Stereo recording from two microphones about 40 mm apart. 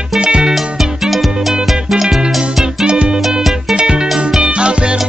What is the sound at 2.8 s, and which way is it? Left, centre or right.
Music, right.